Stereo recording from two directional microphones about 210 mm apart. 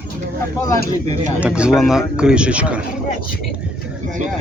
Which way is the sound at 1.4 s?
5° right (ahead or behind).